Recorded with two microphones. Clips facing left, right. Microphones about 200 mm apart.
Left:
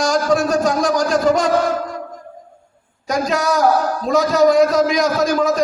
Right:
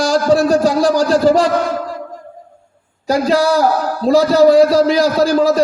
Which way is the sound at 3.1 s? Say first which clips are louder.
Right 5 dB; 30° right (ahead or behind).